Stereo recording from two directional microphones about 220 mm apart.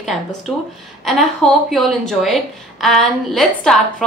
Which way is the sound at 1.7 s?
Centre (ahead or behind).